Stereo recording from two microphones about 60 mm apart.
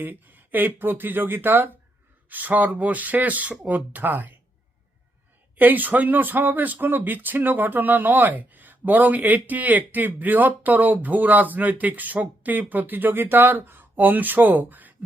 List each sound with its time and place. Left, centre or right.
0.0 s speech: right
5.5 s speech: right